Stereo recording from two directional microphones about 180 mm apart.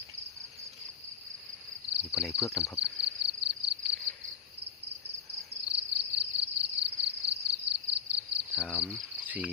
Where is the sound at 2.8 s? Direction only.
70° right (ahead or behind).